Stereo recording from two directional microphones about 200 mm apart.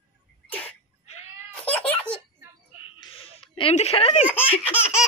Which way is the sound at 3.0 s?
25° left (ahead or behind).